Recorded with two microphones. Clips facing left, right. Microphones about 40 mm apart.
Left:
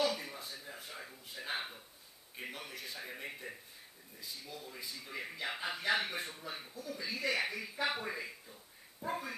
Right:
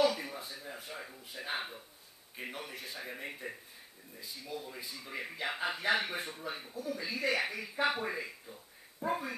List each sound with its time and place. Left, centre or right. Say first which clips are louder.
0.1 s a sound: right 2 dB; centre
2.3 s a man's voice: right 2 dB; centre
5.6 s a man's voice: right 2 dB; centre